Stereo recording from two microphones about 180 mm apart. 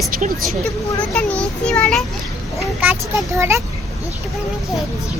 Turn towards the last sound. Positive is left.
turn(degrees=-15)  # may be behind; listen again after turning